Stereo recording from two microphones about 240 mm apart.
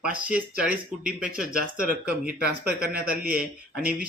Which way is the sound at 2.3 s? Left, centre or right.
Right.